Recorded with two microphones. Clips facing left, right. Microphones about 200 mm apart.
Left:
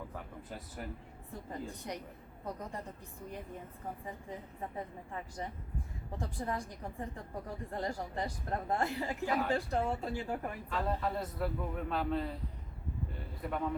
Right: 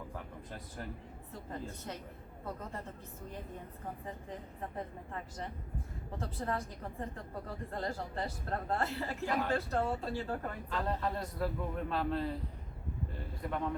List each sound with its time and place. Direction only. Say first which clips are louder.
1.3 s a woman's voice: left 1 dB; 15° left (ahead or behind)
6.1 s a woman's voice: even; 15° left (ahead or behind)
10.7 s a man's voice: left 1 dB; centre (ahead or behind)
13.4 s a man's voice: even; centre (ahead or behind)